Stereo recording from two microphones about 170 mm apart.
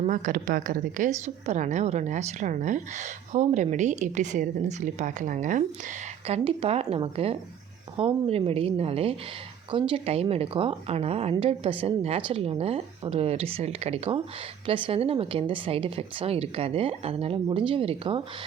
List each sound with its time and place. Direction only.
0.1 s a woman's voice: 50° right (ahead or behind)
6.2 s a woman's voice: 35° right (ahead or behind)